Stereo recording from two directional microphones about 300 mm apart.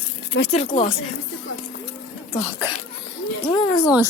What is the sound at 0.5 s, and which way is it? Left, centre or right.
Speech, left.